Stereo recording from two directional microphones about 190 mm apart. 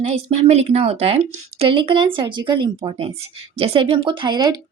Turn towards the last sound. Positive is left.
turn(degrees=-20)  # may be behind; listen again after turning